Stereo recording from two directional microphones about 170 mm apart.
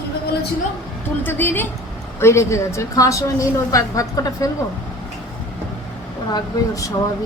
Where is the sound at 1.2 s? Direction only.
10° left (ahead or behind).